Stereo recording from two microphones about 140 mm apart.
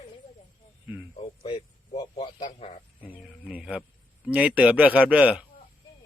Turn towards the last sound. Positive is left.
turn(degrees=-10)  # may be behind; listen again after turning